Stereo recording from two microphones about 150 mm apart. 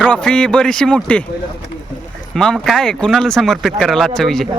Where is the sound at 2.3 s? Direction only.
5° left (ahead or behind).